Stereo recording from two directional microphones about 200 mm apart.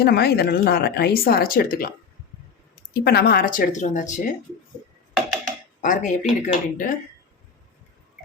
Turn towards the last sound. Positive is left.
turn(degrees=40)  # may be behind; listen again after turning